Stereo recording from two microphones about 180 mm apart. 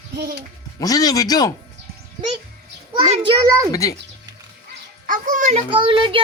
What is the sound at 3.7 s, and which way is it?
Speech, 20° left (ahead or behind).